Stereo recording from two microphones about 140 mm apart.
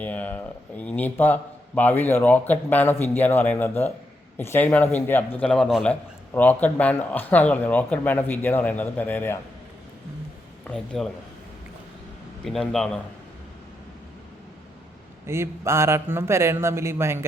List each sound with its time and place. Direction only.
0.0 s a man's voice: 10° left (ahead or behind)
10.7 s a man's voice: centre (ahead or behind)
12.5 s a man's voice: 5° left (ahead or behind)
15.3 s speech: 20° right (ahead or behind)